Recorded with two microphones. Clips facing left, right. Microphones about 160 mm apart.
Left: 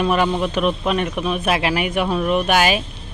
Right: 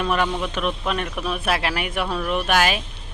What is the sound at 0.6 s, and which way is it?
A woman's voice, 5° left (ahead or behind).